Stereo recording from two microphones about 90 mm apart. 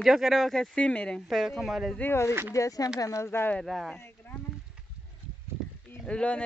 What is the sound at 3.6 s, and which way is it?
Speech, centre (ahead or behind).